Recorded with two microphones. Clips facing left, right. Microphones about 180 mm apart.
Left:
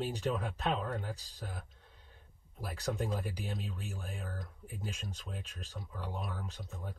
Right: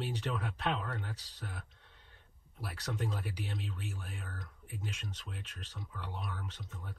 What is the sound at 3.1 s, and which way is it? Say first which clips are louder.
Speech: left 3 dB; 45° left (ahead or behind).